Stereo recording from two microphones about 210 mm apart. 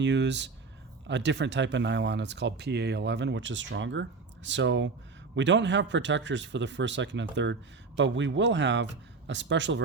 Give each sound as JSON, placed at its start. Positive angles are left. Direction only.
{"t": 0.0, "sound": "speech", "side_deg": -55}